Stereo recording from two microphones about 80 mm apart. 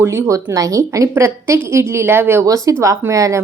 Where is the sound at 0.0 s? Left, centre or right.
Right.